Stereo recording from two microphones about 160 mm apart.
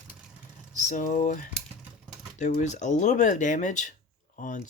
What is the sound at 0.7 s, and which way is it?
Speech, 50° left (ahead or behind).